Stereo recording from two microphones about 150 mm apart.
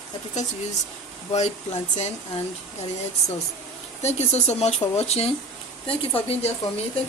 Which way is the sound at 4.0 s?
50° left (ahead or behind).